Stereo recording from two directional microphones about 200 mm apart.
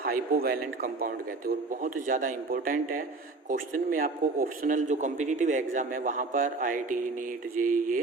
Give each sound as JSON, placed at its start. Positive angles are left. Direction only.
{"t": 0.0, "sound": "a man's voice", "side_deg": -45}